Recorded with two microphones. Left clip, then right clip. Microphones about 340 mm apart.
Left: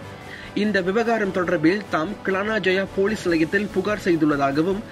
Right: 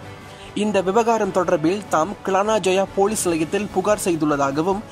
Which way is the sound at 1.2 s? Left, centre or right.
Right.